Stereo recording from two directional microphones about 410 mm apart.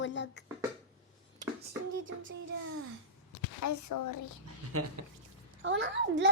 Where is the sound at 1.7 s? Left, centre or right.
Right.